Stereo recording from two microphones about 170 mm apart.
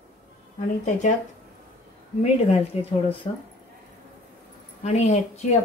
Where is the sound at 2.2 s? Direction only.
40° left (ahead or behind).